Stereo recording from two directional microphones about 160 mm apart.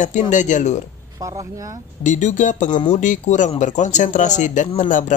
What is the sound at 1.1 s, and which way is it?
Speech, 20° right (ahead or behind).